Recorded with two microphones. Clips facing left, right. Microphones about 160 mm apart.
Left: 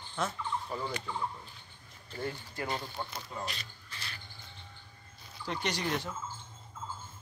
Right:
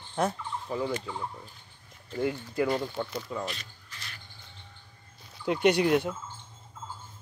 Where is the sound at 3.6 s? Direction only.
30° left (ahead or behind).